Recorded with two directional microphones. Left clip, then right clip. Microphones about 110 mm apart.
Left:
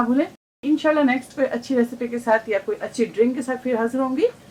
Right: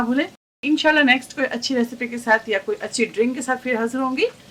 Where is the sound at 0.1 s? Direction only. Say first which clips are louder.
Left 1 dB; 50° right (ahead or behind).